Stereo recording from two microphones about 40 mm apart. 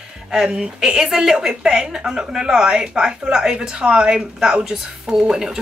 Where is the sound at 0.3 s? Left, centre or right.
Centre.